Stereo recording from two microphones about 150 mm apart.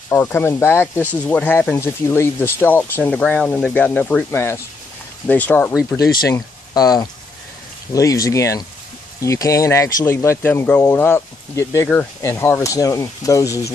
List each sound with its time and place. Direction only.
0.1 s speech: 15° left (ahead or behind)
6.2 s speech: 25° left (ahead or behind)